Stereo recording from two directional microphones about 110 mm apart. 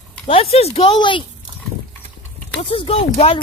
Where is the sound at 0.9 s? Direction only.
45° left (ahead or behind).